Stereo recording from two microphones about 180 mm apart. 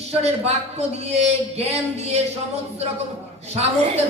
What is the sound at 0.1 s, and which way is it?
A man's voice, 35° right (ahead or behind).